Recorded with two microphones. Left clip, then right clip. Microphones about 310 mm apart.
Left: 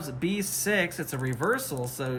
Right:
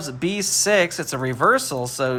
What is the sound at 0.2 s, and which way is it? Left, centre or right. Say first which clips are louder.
Speech: right 9 dB; centre.